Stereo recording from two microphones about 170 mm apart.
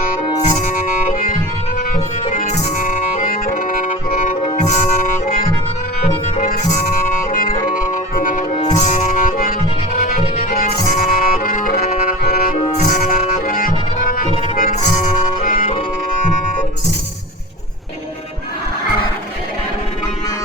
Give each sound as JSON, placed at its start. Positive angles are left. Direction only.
{"t": 0.5, "sound": "music", "side_deg": 45}